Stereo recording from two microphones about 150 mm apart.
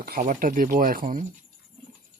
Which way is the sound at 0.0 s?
85° right.